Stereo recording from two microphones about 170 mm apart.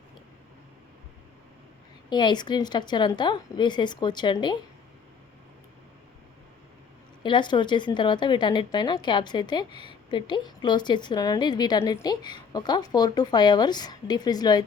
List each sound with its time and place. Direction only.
2.0 s a woman's voice: 25° left (ahead or behind)
7.2 s a woman's voice: 25° left (ahead or behind)